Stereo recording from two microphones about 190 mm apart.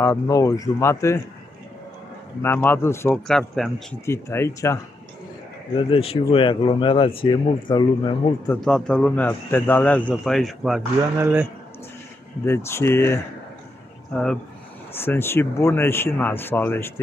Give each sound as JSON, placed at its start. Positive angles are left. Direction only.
{"t": 0.0, "sound": "speech", "side_deg": 15}
{"t": 2.4, "sound": "speech", "side_deg": 10}
{"t": 3.3, "sound": "a man's voice", "side_deg": 0}
{"t": 4.0, "sound": "speech", "side_deg": 15}
{"t": 5.8, "sound": "speech", "side_deg": 30}
{"t": 8.5, "sound": "a man's voice", "side_deg": 5}
{"t": 12.4, "sound": "a man's voice", "side_deg": 15}